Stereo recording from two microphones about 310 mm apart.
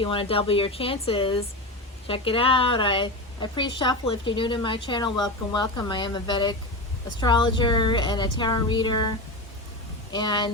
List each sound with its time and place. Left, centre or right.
0.0 s a woman's voice: centre